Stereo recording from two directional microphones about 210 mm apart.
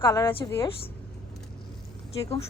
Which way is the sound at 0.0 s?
20° left (ahead or behind).